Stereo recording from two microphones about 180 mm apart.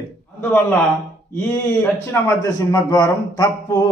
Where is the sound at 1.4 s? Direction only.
10° left (ahead or behind).